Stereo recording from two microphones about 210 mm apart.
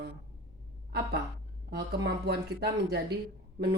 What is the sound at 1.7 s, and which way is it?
Speech, 50° right (ahead or behind).